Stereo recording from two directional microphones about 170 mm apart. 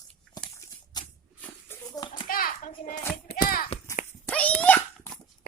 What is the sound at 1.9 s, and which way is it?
Children playing, 20° left (ahead or behind).